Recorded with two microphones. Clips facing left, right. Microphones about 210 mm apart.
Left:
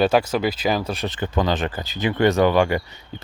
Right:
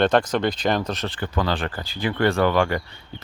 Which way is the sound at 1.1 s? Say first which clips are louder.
Left 6 dB; 20° left (ahead or behind).